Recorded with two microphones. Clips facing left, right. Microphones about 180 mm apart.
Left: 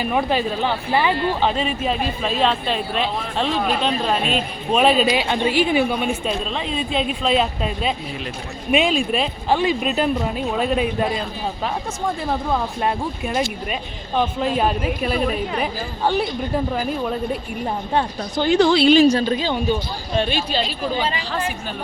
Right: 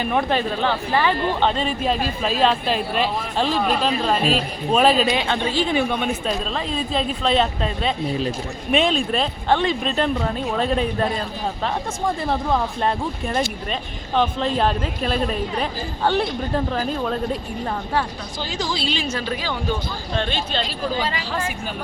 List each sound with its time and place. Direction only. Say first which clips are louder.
0.0 s speech: left 1 dB; 5° left (ahead or behind)
4.2 s a woman's voice: right 2 dB; 35° right (ahead or behind)
4.7 s speech: left 1 dB; centre (ahead or behind)
5.3 s speech: left 3 dB; 15° left (ahead or behind)
12.3 s speech: right 1 dB; 5° left (ahead or behind)
16.7 s speech: even; 10° left (ahead or behind)
18.3 s a woman's voice: left 12 dB; 60° left (ahead or behind)
18.9 s a woman's voice: left 11 dB; 35° left (ahead or behind); by 20.9 s 10° left (ahead or behind)
20.9 s a woman's voice: left 2 dB; 20° left (ahead or behind)